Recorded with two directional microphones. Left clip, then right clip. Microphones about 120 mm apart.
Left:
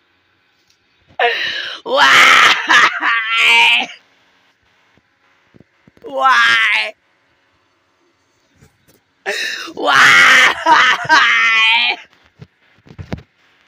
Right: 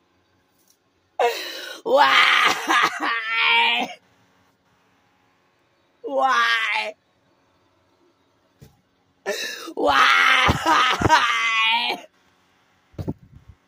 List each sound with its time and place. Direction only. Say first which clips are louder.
1.1 s groan: left 7 dB; 10° right (ahead or behind)
6.0 s speech: left 8 dB; 10° right (ahead or behind)
9.2 s throat clearing: left 7 dB; 5° right (ahead or behind)
9.9 s a sound: left 9 dB; 5° right (ahead or behind)